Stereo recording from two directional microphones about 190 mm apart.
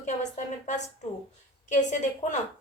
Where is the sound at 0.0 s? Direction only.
40° left (ahead or behind).